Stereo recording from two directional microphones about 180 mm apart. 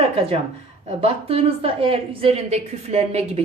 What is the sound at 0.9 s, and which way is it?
A woman's voice, 35° right (ahead or behind).